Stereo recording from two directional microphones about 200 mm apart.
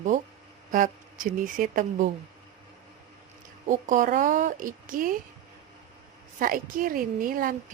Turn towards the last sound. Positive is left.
turn(degrees=-45)  # may be behind; listen again after turning